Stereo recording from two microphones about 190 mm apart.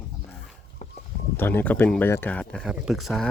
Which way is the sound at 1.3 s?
10° left (ahead or behind).